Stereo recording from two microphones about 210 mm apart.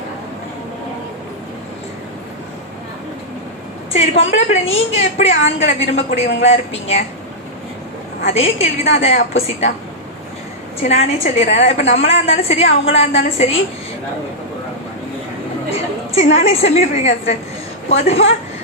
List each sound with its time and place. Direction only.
3.9 s a woman's voice: 30° left (ahead or behind)
8.3 s a woman's voice: 30° left (ahead or behind)
10.8 s a woman's voice: 30° left (ahead or behind)
16.1 s a woman's voice: 30° left (ahead or behind)